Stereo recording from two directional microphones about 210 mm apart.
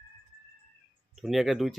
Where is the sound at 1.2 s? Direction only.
Centre (ahead or behind).